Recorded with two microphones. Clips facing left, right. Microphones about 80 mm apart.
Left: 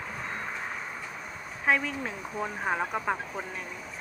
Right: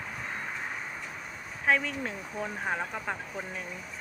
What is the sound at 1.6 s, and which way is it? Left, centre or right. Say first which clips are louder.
Speech: even; centre.